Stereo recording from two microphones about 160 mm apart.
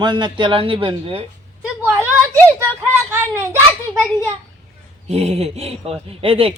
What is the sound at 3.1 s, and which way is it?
Speech, 15° right (ahead or behind).